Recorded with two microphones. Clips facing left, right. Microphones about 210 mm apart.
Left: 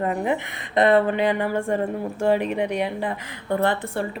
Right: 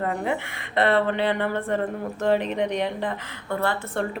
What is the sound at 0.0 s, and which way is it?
Speech, 20° left (ahead or behind).